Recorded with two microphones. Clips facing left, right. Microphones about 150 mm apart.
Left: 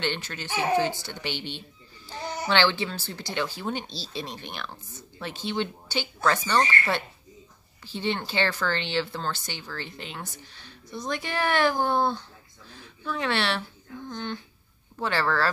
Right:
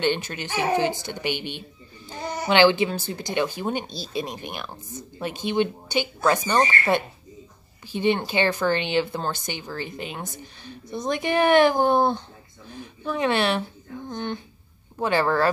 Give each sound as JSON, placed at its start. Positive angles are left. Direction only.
{"t": 0.0, "sound": "speech", "side_deg": -15}
{"t": 7.8, "sound": "a woman's voice", "side_deg": -15}